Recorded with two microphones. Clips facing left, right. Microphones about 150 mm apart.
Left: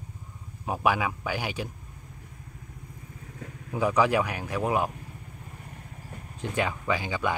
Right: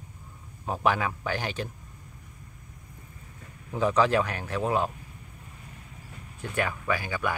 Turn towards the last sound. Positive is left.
turn(degrees=20)  # may be behind; listen again after turning